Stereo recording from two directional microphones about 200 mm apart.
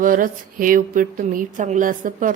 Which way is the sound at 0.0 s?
45° right (ahead or behind).